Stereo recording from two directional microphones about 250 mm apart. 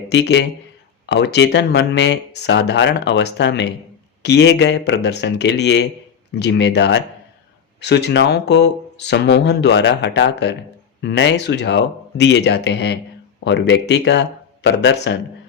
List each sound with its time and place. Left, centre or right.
0.1 s speech: left